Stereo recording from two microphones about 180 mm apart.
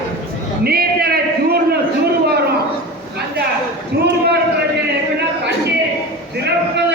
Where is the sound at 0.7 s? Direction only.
60° right (ahead or behind).